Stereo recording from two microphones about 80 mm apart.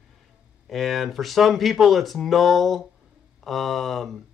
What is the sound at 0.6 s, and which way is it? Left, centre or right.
A man's voice, centre.